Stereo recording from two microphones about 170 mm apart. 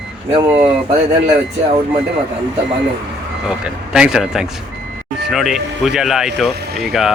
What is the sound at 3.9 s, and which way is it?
Speech, 5° right (ahead or behind).